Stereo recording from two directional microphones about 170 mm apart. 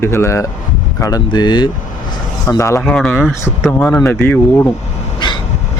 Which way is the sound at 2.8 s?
5° left (ahead or behind).